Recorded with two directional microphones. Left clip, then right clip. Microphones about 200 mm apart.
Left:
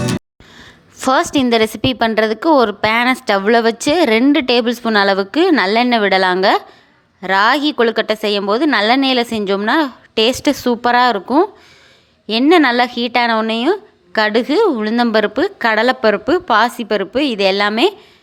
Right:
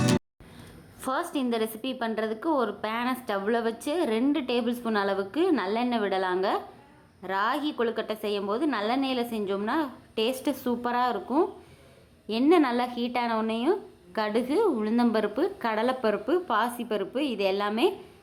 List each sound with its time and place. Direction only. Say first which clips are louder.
1.0 s speech: left 15 dB; 30° left (ahead or behind)